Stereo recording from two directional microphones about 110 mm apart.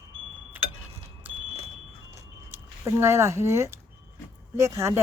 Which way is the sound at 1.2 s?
15° right (ahead or behind).